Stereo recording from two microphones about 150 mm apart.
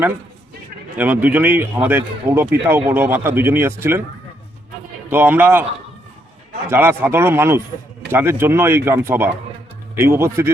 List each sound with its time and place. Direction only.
0.9 s speech: 10° right (ahead or behind)
5.1 s speech: 10° right (ahead or behind)
6.7 s speech: 15° right (ahead or behind)